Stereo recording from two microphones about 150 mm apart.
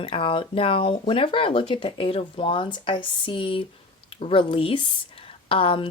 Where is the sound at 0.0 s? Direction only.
35° left (ahead or behind).